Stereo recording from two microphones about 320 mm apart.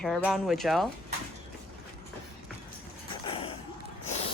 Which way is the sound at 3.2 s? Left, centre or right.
Centre.